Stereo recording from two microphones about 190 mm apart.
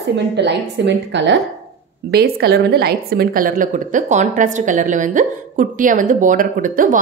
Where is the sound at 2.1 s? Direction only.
55° right (ahead or behind).